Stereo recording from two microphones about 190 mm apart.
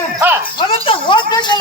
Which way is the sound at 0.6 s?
30° left (ahead or behind).